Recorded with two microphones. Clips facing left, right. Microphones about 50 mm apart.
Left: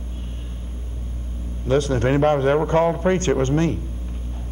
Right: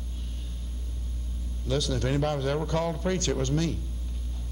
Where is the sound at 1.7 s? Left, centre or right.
Left.